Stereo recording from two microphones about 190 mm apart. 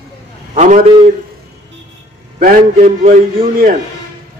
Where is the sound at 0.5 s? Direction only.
40° right (ahead or behind).